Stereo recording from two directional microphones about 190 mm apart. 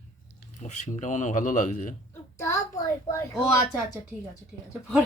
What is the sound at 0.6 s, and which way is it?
Speech, 40° left (ahead or behind).